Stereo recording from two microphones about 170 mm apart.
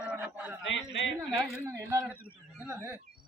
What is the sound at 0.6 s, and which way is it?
Speech, 90° left.